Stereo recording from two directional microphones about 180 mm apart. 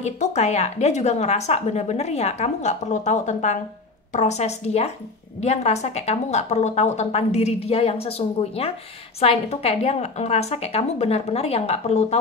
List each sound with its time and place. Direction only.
0.0 s a woman's voice: 40° left (ahead or behind)